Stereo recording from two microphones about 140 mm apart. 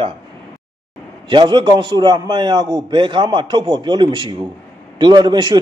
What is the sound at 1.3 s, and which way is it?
A man's voice, 30° right (ahead or behind).